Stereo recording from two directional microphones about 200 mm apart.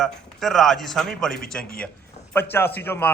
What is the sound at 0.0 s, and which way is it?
A man's voice, centre (ahead or behind).